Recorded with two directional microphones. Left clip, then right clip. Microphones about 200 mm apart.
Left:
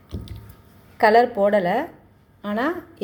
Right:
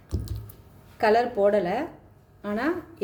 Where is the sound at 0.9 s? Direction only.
20° left (ahead or behind).